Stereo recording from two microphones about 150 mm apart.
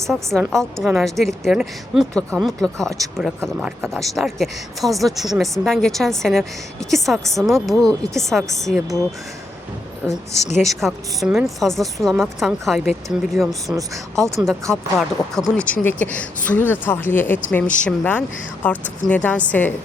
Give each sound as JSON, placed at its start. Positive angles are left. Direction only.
{"t": 0.1, "sound": "a woman's voice", "side_deg": 0}
{"t": 10.3, "sound": "a woman's voice", "side_deg": 45}
{"t": 10.6, "sound": "a woman's voice", "side_deg": 0}
{"t": 14.2, "sound": "speech", "side_deg": -20}
{"t": 14.4, "sound": "a woman's voice", "side_deg": 0}